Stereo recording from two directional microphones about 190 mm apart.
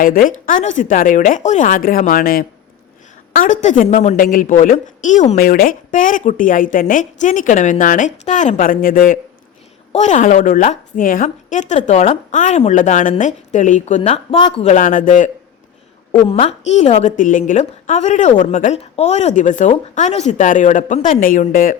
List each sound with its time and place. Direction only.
0.0 s a woman's voice: 50° left (ahead or behind); by 14.6 s 25° left (ahead or behind)
14.6 s a woman's voice: 40° left (ahead or behind)